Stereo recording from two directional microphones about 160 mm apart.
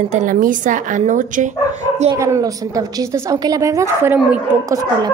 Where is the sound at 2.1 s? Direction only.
20° right (ahead or behind).